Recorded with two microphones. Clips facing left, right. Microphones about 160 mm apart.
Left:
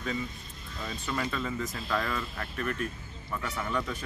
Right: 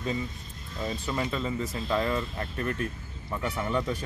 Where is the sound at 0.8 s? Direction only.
25° right (ahead or behind).